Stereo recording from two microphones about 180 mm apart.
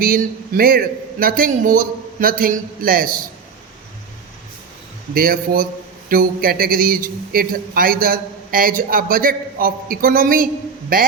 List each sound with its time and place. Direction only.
0.0 s a man's voice: 50° right (ahead or behind)
5.1 s a man's voice: 55° right (ahead or behind)